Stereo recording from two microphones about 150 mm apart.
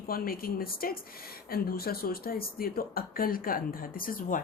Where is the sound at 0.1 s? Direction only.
80° left.